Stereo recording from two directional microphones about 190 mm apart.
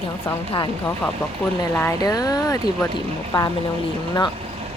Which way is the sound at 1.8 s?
15° left (ahead or behind).